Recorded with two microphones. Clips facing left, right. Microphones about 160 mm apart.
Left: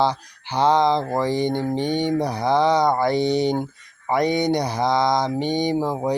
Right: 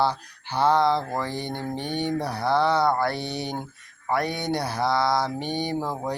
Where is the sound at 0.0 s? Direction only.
15° left (ahead or behind).